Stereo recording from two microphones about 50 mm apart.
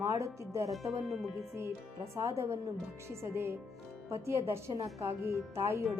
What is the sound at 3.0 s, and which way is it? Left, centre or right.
Speech, right.